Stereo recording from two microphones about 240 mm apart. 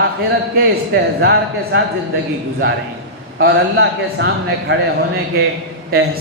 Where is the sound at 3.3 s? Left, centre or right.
Right.